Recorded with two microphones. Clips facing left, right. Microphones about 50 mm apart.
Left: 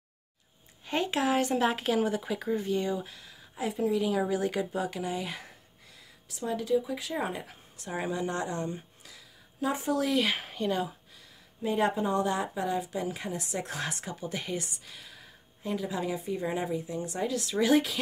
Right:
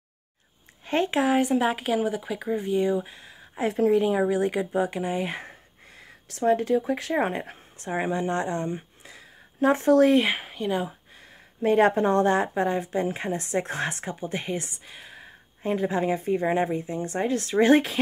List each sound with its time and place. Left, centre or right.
0.8 s speech: right
1.2 s speech: centre
3.6 s speech: right
4.0 s speech: right
6.2 s speech: right
9.6 s speech: right
10.3 s speech: centre
11.6 s speech: right